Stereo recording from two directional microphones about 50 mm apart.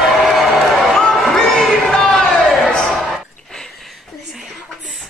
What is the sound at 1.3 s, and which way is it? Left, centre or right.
Crowd, centre.